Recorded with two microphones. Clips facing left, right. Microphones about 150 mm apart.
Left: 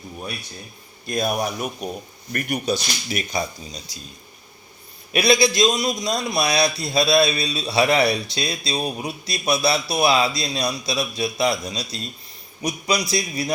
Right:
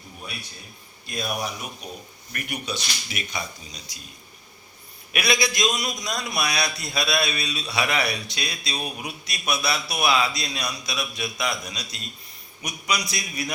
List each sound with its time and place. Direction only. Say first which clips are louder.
1.0 s a man's voice: left 6 dB; 45° left (ahead or behind); by 4.0 s 30° left (ahead or behind)
5.1 s a man's voice: left 7 dB; 30° left (ahead or behind)